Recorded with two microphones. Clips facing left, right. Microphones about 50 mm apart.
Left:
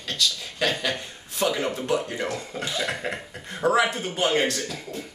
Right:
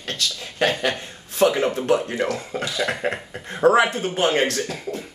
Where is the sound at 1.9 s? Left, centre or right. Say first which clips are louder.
Right 4 dB; right.